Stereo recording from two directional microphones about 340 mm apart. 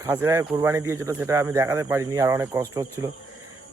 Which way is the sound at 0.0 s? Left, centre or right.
Centre.